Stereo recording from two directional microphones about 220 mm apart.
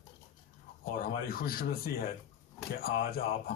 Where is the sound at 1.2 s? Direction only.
40° left (ahead or behind).